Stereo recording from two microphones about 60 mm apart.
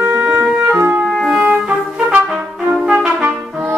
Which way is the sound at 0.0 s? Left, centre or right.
Centre.